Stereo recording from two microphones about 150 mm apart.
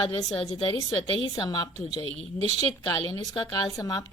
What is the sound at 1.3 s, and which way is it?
Speech, 30° left (ahead or behind).